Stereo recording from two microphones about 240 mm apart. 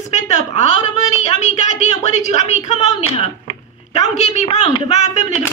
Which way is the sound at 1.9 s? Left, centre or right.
Left.